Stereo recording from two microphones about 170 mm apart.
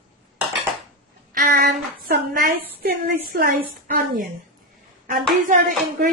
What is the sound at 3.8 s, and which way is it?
Speech, 55° right (ahead or behind).